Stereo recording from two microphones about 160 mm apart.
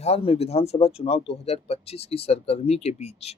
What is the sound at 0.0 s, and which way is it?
Speech, 40° left (ahead or behind).